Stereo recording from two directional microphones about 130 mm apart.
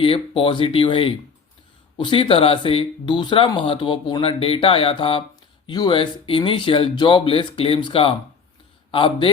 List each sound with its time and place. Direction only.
0.0 s speech: 45° left (ahead or behind)